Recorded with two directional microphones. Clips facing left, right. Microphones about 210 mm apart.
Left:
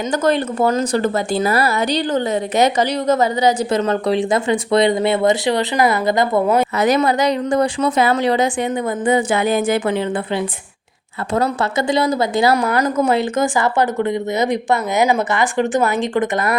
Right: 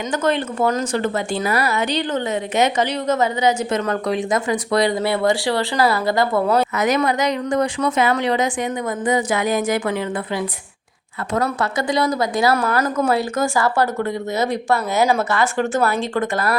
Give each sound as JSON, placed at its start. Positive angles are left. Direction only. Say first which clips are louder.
{"t": 0.1, "sound": "speech", "louder": "left 3 dB", "side_deg": 40}
{"t": 6.7, "sound": "a woman's voice", "louder": "left 3 dB", "side_deg": 30}